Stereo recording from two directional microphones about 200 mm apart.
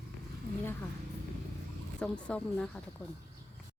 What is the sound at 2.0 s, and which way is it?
Speech, 5° left (ahead or behind).